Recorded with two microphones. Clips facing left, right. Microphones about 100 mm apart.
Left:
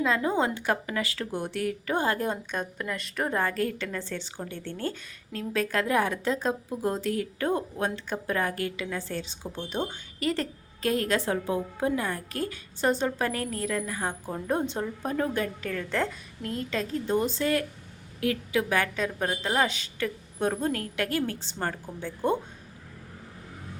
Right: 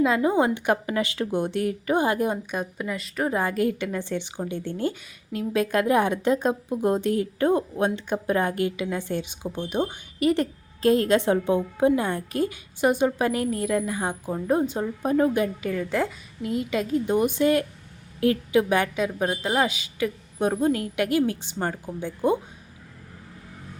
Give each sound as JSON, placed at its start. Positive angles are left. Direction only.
{"t": 0.0, "sound": "a woman's voice", "side_deg": -15}
{"t": 3.4, "sound": "a woman's voice", "side_deg": -15}
{"t": 18.9, "sound": "a woman's voice", "side_deg": -10}